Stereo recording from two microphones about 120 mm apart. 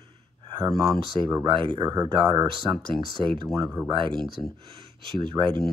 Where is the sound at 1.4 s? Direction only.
40° right (ahead or behind).